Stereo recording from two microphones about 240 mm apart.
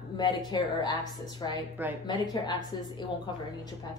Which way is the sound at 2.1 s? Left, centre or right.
Centre.